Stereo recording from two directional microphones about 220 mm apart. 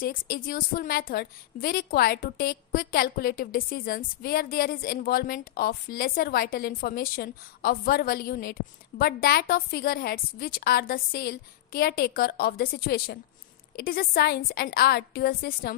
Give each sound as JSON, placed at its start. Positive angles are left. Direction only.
{"t": 0.0, "sound": "a woman's voice", "side_deg": 40}